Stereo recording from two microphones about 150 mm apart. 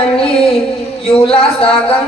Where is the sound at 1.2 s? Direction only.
40° left (ahead or behind).